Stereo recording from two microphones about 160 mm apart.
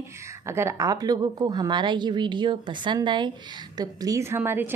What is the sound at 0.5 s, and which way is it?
Speech, 15° right (ahead or behind).